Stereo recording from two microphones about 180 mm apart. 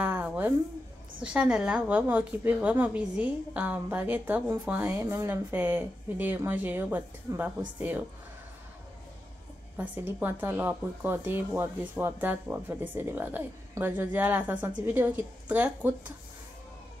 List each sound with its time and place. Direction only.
0.0 s a sound: 10° right (ahead or behind)
1.2 s a woman's voice: 5° right (ahead or behind)
9.8 s a woman's voice: 10° right (ahead or behind)